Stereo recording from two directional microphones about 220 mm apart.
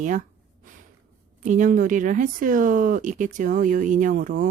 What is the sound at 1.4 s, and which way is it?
Speech, 35° right (ahead or behind).